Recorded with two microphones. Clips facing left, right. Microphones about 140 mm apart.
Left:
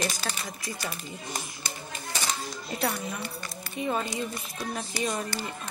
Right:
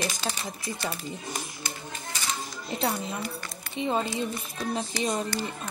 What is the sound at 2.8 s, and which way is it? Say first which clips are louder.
A woman's voice: right 2 dB; 25° right (ahead or behind).